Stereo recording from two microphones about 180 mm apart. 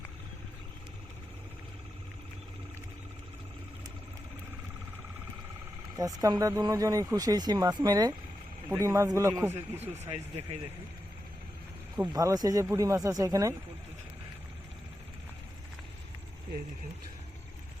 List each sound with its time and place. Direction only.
6.0 s a man's voice: 20° right (ahead or behind)
10.0 s speech: 35° right (ahead or behind)
11.9 s speech: 20° right (ahead or behind)